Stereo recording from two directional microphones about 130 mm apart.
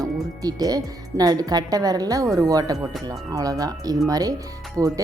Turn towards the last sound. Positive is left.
turn(degrees=-25)  # may be behind; listen again after turning